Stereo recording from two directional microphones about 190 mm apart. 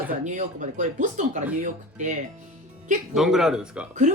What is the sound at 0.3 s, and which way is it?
A woman's voice, 40° right (ahead or behind).